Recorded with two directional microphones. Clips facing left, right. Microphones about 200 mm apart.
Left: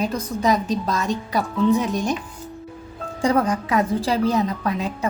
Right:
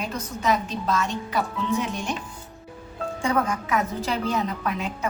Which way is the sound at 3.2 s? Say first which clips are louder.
Left 5 dB; 35° left (ahead or behind).